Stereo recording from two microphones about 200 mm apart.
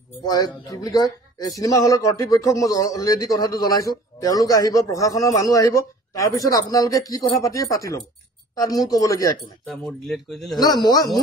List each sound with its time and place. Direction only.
0.2 s a man's voice: 20° left (ahead or behind)
9.7 s speech: centre (ahead or behind)
10.6 s speech: 20° left (ahead or behind)